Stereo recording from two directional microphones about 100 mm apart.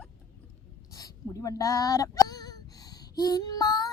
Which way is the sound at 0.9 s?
35° left (ahead or behind).